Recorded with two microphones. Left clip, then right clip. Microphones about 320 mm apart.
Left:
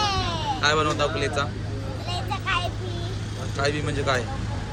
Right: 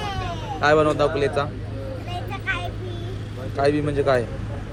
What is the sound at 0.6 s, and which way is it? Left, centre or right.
Speech, centre.